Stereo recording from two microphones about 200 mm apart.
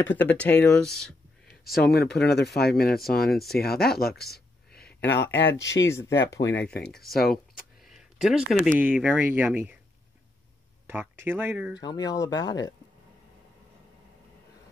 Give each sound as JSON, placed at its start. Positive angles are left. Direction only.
{"t": 0.0, "sound": "speech", "side_deg": 10}
{"t": 1.8, "sound": "speech", "side_deg": 50}
{"t": 5.4, "sound": "speech", "side_deg": 15}
{"t": 6.9, "sound": "speech", "side_deg": 0}
{"t": 7.2, "sound": "speech", "side_deg": 50}
{"t": 7.8, "sound": "a sound", "side_deg": 0}
{"t": 8.7, "sound": "speech", "side_deg": -10}
{"t": 10.9, "sound": "speech", "side_deg": -10}
{"t": 11.8, "sound": "speech", "side_deg": 20}